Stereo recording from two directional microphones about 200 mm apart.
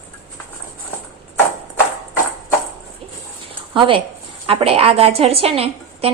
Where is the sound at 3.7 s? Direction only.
25° right (ahead or behind).